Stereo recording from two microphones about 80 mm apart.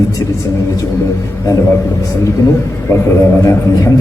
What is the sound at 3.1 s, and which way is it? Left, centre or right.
Speech, left.